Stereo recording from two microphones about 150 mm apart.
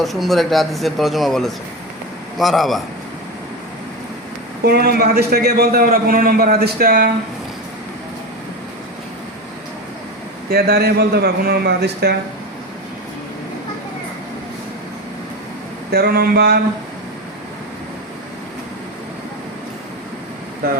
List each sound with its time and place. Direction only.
0.0 s speech: centre (ahead or behind)
4.6 s a man's voice: 90° right
10.5 s a man's voice: 90° right
15.9 s a man's voice: 90° right
20.6 s a man's voice: 90° right